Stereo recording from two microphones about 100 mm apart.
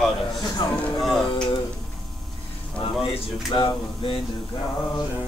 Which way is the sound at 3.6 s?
55° left (ahead or behind).